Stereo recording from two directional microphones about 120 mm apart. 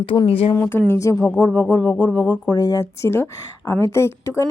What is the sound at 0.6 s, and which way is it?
Speech, 20° left (ahead or behind).